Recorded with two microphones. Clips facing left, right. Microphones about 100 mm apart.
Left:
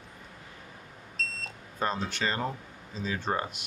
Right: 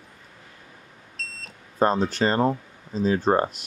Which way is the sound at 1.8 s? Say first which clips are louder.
Right 9 dB; 40° right (ahead or behind).